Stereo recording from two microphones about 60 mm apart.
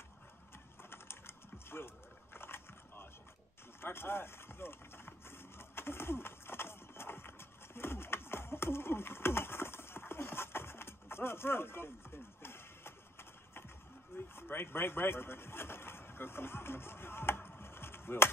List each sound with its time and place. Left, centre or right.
0.8 s typing: left
2.3 s dog: left
3.8 s a sound: left
14.1 s speech: left